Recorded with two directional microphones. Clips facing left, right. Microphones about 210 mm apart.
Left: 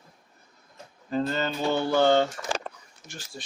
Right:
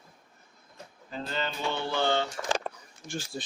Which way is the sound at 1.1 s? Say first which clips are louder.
Left 7 dB; 45° left (ahead or behind).